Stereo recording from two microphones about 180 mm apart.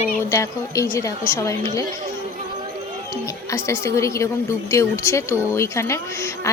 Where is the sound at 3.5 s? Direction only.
15° left (ahead or behind).